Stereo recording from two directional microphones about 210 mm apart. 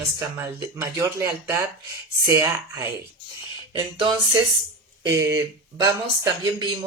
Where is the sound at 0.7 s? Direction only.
10° right (ahead or behind).